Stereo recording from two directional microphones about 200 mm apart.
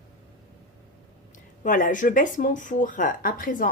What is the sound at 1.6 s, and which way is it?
Speech, 40° left (ahead or behind).